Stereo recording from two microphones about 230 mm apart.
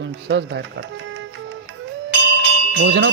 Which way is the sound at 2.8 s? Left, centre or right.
Right.